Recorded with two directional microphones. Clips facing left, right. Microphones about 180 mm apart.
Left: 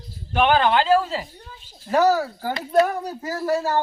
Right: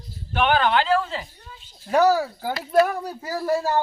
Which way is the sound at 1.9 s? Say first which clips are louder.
Even; 10° right (ahead or behind).